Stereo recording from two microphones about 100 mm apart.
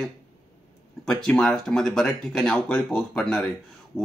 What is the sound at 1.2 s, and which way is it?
Speech, 5° left (ahead or behind).